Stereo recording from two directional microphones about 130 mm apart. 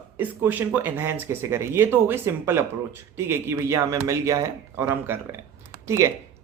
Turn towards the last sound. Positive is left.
turn(degrees=-20)  # may be behind; listen again after turning